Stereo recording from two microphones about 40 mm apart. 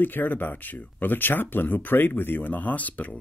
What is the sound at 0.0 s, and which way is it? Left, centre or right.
Speech, left.